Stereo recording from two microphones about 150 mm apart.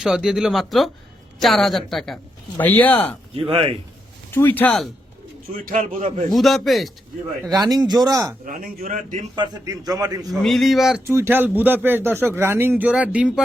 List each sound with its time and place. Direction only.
0.0 s speech: 5° right (ahead or behind)
2.6 s speech: 10° left (ahead or behind)
3.3 s speech: 35° right (ahead or behind)
4.3 s speech: 15° left (ahead or behind)
5.5 s a man's voice: 65° right (ahead or behind)
6.3 s speech: centre (ahead or behind)
7.5 s a man's voice: 25° right (ahead or behind)
8.4 s a man's voice: 65° right (ahead or behind)
9.3 s a man's voice: 30° right (ahead or behind)
10.4 s speech: centre (ahead or behind)
11.0 s speech: 15° right (ahead or behind)